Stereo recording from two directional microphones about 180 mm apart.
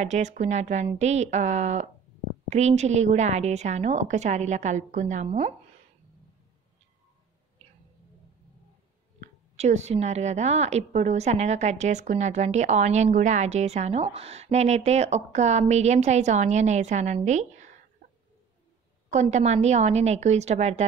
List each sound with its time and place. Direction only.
0.0 s a woman's voice: 40° right (ahead or behind)
9.2 s a woman's voice: 40° right (ahead or behind)
19.0 s a woman's voice: 40° right (ahead or behind)